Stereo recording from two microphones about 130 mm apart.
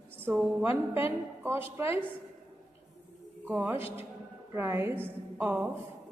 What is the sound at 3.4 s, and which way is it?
A woman's voice, 15° right (ahead or behind).